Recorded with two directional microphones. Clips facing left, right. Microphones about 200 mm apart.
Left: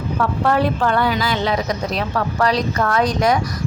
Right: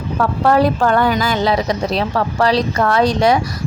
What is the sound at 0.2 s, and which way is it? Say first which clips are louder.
A woman's voice: right 4 dB; 40° right (ahead or behind).